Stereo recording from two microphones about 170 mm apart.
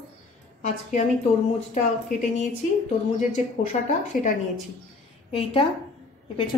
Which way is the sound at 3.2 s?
45° left (ahead or behind).